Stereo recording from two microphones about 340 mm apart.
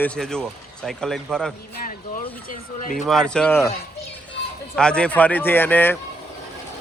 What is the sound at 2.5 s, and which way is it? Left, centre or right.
Speech, left.